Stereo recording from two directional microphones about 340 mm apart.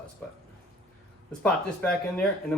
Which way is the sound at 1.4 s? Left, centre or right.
Centre.